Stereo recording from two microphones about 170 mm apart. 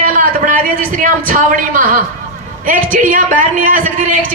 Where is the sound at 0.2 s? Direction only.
55° right (ahead or behind).